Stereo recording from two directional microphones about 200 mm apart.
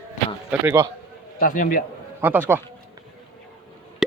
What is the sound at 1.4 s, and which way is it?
Speech, 45° left (ahead or behind).